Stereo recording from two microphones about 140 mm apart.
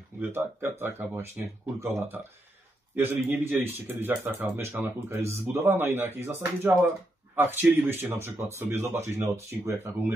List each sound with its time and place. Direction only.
0.2 s speech: 15° right (ahead or behind)